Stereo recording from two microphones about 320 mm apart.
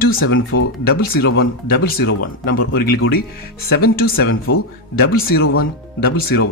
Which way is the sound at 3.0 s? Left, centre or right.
Left.